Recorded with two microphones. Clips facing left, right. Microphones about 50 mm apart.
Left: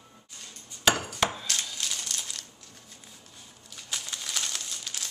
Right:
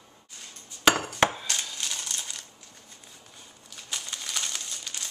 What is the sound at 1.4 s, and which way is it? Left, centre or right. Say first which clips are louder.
Crushing: even; centre.